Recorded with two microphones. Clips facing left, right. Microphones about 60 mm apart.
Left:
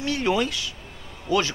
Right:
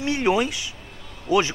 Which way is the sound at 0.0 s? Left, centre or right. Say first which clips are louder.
Right 2 dB; right.